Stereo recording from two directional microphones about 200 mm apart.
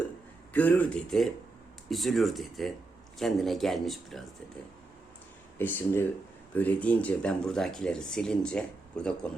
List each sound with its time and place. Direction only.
0.5 s speech: 10° left (ahead or behind)
5.5 s speech: 10° left (ahead or behind)